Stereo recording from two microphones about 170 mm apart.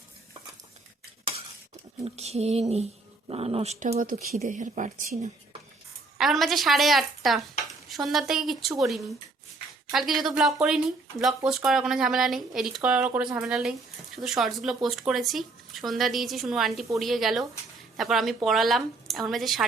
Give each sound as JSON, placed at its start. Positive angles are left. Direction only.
{"t": 2.0, "sound": "speech", "side_deg": -40}
{"t": 3.9, "sound": "speech", "side_deg": -55}
{"t": 6.1, "sound": "speech", "side_deg": 0}